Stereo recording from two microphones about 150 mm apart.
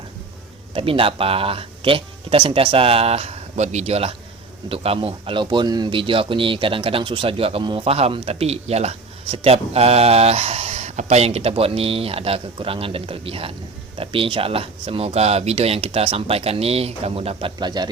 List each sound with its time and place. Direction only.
0.7 s speech: 35° right (ahead or behind)